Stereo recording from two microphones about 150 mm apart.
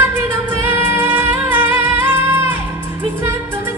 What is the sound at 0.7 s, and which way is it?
Music, 15° right (ahead or behind).